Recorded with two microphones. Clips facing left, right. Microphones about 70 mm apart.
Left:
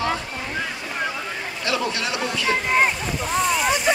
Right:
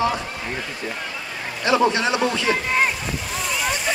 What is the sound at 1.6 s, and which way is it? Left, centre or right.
Speech, right.